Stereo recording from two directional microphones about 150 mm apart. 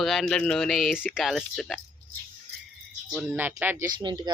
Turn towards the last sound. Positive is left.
turn(degrees=-30)  # may be behind; listen again after turning